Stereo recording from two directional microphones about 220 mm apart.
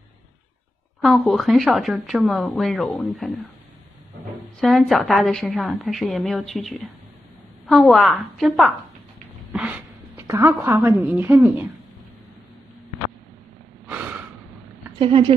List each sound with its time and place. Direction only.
1.0 s speech: centre (ahead or behind)
4.6 s a woman's voice: centre (ahead or behind)
15.0 s a woman's voice: 25° right (ahead or behind)